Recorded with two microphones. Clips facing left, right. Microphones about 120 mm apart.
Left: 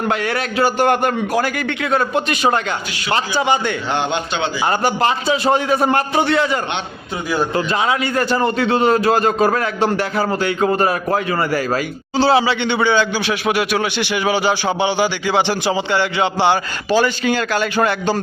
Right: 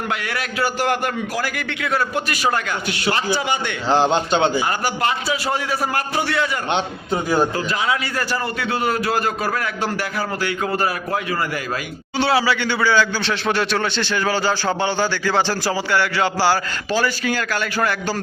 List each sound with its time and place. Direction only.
0.1 s a man's voice: 30° left (ahead or behind)
3.9 s a man's voice: 35° right (ahead or behind)
4.6 s a man's voice: 30° left (ahead or behind)
11.1 s a man's voice: 40° left (ahead or behind); by 13.1 s 20° left (ahead or behind)
13.2 s a man's voice: 10° left (ahead or behind)